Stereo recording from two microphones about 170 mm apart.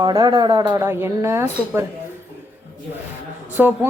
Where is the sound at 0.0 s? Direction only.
25° right (ahead or behind).